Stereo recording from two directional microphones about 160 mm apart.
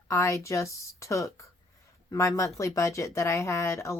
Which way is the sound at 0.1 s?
20° left (ahead or behind).